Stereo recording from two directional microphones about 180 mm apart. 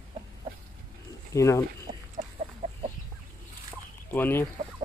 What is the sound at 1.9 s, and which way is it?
Chicken, 35° right (ahead or behind).